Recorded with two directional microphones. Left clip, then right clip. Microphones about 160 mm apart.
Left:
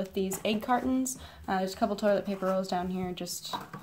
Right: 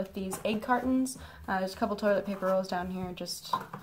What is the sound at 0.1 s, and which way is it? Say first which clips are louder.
Speech: left 3 dB; 30° left (ahead or behind).